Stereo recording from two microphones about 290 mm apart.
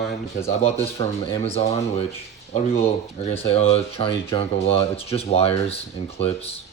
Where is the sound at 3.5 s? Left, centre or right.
Centre.